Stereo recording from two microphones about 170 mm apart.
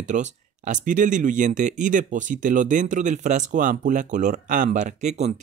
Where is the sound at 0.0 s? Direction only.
45° right (ahead or behind).